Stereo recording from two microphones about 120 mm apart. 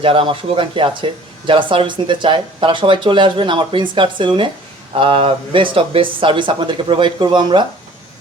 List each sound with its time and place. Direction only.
0.0 s speech: 45° right (ahead or behind)